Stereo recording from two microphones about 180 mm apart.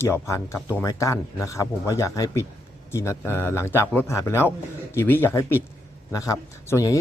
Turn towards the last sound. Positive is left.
turn(degrees=20)  # may be behind; listen again after turning